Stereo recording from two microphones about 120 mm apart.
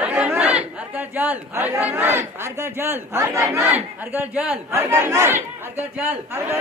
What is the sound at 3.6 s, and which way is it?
Speech, 15° right (ahead or behind).